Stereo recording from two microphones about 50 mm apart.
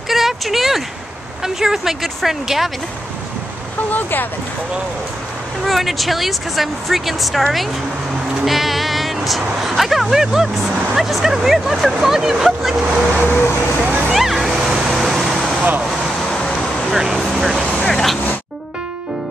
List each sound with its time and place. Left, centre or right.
0.1 s a sound: centre
1.4 s speech: centre
3.9 s speech: left
5.7 s a woman's voice: centre
8.5 s speech: centre
13.1 s speech: left
13.8 s a sound: right
14.1 s vehicle: centre
15.9 s a sound: centre
16.9 s vehicle: centre
17.2 s vehicle: centre